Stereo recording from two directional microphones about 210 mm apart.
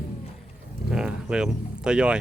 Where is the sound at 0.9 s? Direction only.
5° right (ahead or behind).